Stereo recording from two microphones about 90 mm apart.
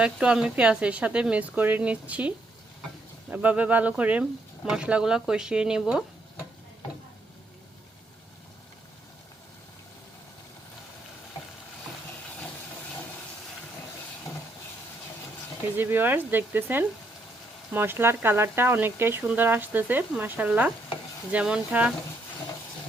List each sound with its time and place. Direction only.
0.0 s speech: 10° right (ahead or behind)
15.7 s speech: 20° right (ahead or behind)